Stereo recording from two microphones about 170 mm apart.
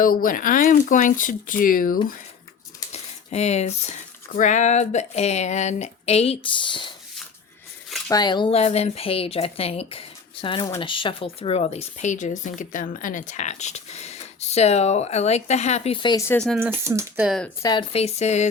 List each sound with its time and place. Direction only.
0.0 s speech: 55° left (ahead or behind)
2.9 s speech: 40° left (ahead or behind)
8.0 s speech: 20° left (ahead or behind)
16.2 s speech: 15° left (ahead or behind)
16.6 s speech: 15° right (ahead or behind)
17.2 s speech: centre (ahead or behind)
17.6 s speech: 25° left (ahead or behind)
17.9 s speech: 40° left (ahead or behind)